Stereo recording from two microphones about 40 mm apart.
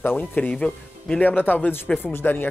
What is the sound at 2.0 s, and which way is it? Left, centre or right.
Speech, left.